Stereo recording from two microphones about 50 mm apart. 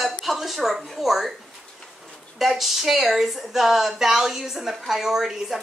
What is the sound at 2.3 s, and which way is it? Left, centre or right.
A woman's voice, centre.